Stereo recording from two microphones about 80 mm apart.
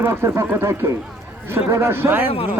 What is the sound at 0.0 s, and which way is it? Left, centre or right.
A man's voice, right.